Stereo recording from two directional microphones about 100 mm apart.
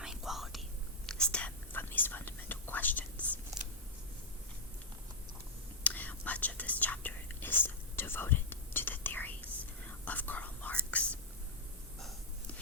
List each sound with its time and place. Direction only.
0.0 s whispering: 5° right (ahead or behind)
1.0 s whispering: 10° left (ahead or behind)
5.8 s whispering: 15° left (ahead or behind)